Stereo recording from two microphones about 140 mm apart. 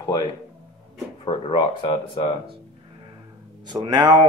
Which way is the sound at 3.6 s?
30° right (ahead or behind).